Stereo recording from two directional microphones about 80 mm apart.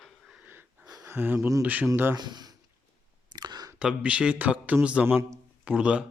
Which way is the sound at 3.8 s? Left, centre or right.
Centre.